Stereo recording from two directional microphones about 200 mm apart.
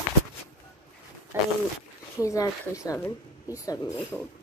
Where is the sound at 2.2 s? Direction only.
15° left (ahead or behind).